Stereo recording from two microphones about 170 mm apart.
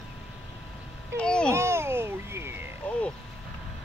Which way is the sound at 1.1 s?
5° left (ahead or behind).